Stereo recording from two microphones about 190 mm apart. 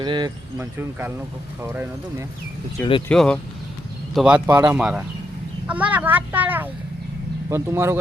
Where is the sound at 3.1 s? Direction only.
5° left (ahead or behind).